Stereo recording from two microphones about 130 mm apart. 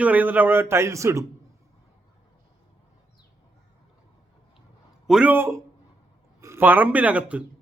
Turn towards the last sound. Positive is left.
turn(degrees=-10)  # may be behind; listen again after turning